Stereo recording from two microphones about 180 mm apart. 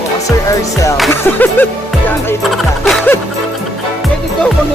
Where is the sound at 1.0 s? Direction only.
10° left (ahead or behind).